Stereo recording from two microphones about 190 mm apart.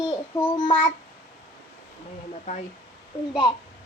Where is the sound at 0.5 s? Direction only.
20° left (ahead or behind).